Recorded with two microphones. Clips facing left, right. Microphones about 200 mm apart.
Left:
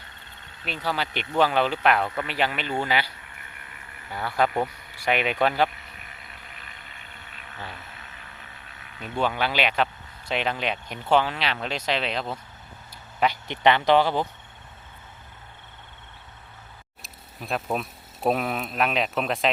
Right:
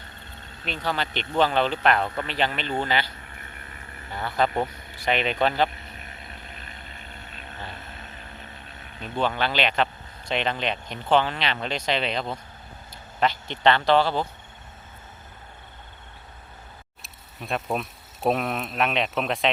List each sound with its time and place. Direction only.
0.6 s speech: 10° left (ahead or behind)
3.6 s vehicle: 35° right (ahead or behind)
4.1 s speech: 10° left (ahead or behind)
6.0 s vehicle: 35° right (ahead or behind)
9.1 s speech: 10° left (ahead or behind)
17.0 s speech: centre (ahead or behind)